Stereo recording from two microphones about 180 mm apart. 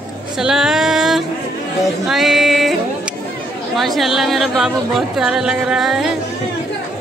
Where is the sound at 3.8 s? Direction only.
Centre (ahead or behind).